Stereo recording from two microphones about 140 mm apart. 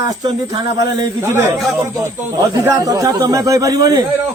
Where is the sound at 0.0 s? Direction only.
30° right (ahead or behind).